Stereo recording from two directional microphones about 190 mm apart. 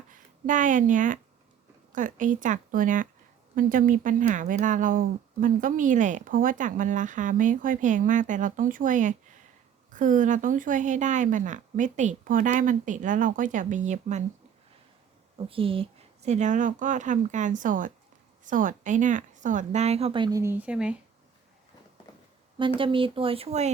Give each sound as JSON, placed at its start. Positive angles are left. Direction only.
{"t": 0.1, "sound": "a woman's voice", "side_deg": -45}
{"t": 15.4, "sound": "a woman's voice", "side_deg": -30}
{"t": 20.4, "sound": "speech", "side_deg": -10}
{"t": 22.5, "sound": "speech", "side_deg": -25}